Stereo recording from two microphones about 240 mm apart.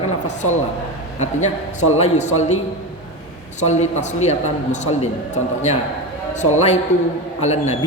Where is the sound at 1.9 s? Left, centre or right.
Left.